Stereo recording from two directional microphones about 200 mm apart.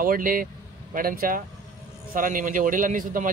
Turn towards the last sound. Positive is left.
turn(degrees=-40)  # may be behind; listen again after turning